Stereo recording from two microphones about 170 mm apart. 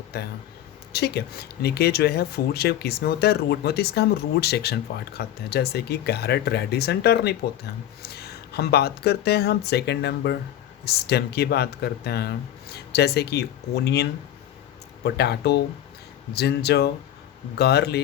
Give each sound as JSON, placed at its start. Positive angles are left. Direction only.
{"t": 0.9, "sound": "speech", "side_deg": 70}